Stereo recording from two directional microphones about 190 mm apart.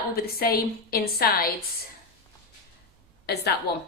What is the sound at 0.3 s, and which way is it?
A woman's voice, 55° left (ahead or behind).